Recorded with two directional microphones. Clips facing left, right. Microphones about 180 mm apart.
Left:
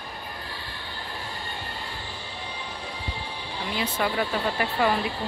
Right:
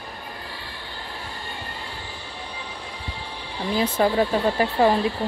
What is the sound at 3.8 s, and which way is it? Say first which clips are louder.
Speech: right 7 dB; 35° right (ahead or behind).